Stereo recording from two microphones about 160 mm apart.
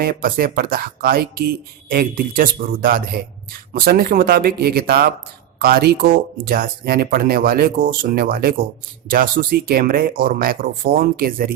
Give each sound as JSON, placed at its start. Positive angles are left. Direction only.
{"t": 0.0, "sound": "speech", "side_deg": -70}